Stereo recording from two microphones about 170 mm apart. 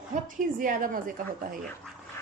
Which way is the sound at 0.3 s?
55° right (ahead or behind).